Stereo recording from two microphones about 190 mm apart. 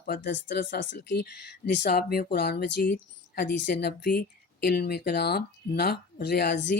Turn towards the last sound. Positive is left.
turn(degrees=60)  # may be behind; listen again after turning